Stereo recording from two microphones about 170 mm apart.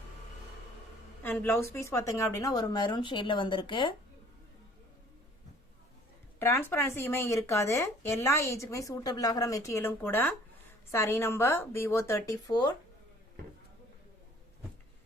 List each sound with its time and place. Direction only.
1.2 s a woman's voice: 10° left (ahead or behind); by 3.9 s 30° left (ahead or behind)
6.4 s speech: 15° left (ahead or behind)